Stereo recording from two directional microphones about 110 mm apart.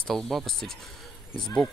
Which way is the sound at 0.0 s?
5° left (ahead or behind).